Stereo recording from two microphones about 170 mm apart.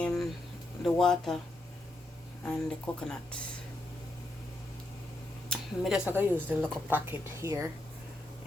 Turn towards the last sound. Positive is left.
turn(degrees=-15)  # may be behind; listen again after turning